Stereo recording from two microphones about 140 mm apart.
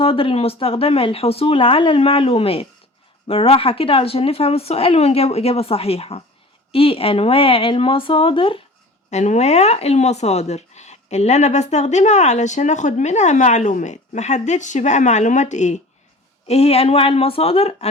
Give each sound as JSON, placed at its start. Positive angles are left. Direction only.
{"t": 0.0, "sound": "a woman's voice", "side_deg": 40}
{"t": 9.0, "sound": "speech", "side_deg": 55}
{"t": 16.5, "sound": "a woman's voice", "side_deg": 45}